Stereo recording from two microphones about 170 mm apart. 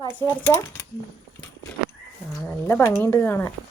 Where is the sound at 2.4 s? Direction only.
15° left (ahead or behind).